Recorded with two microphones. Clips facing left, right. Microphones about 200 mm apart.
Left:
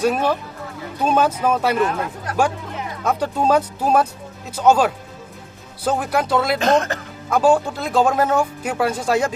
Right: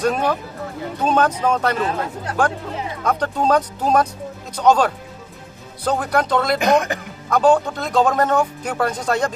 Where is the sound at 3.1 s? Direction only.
10° left (ahead or behind).